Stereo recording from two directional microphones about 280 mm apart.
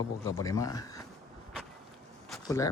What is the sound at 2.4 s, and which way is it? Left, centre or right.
Speech, centre.